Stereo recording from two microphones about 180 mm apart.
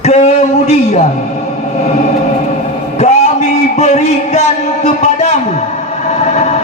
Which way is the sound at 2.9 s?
40° left (ahead or behind).